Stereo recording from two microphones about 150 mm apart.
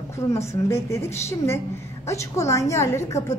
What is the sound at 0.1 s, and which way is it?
A woman's voice, 20° left (ahead or behind).